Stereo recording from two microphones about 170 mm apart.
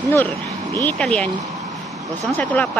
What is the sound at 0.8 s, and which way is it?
Speech, 5° left (ahead or behind).